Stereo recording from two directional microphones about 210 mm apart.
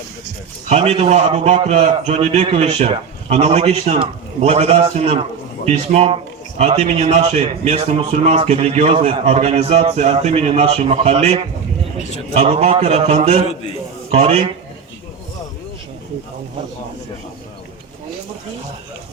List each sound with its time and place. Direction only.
0.7 s a man's voice: 30° right (ahead or behind)
13.5 s a man's voice: 25° left (ahead or behind)
14.1 s a man's voice: 30° right (ahead or behind)